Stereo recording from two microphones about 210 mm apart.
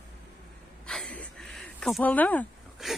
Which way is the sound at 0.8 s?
5° left (ahead or behind).